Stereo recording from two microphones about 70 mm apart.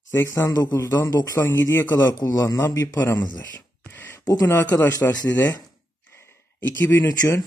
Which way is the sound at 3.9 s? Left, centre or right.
Left.